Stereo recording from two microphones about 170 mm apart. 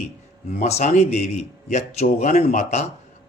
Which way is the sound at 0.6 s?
45° left (ahead or behind).